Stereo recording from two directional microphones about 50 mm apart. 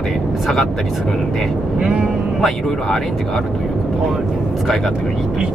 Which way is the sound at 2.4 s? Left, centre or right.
Centre.